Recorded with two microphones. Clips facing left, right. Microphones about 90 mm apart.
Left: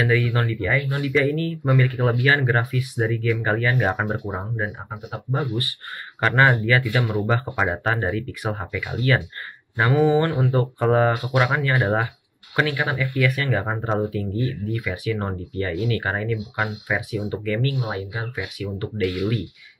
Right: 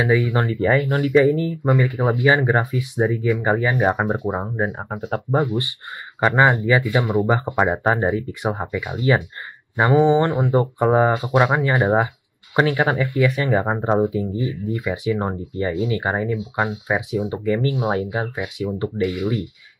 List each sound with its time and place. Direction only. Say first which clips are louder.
0.0 s speech: right 3 dB; 20° right (ahead or behind)
0.5 s speech: right 5 dB; 35° right (ahead or behind)
1.1 s speech: right 5 dB; 20° right (ahead or behind)
4.8 s speech: right 7 dB; 45° right (ahead or behind)
5.4 s speech: right 4 dB; 20° right (ahead or behind); by 18.3 s 40° right (ahead or behind)
18.6 s speech: right 6 dB; 25° right (ahead or behind)